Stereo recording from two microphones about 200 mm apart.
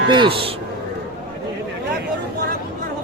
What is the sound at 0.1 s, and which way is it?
Speech, 25° right (ahead or behind).